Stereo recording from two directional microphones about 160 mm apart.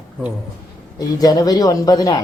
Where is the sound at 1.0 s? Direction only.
25° left (ahead or behind).